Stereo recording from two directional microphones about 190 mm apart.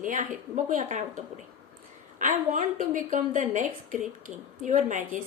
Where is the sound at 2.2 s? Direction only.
45° right (ahead or behind).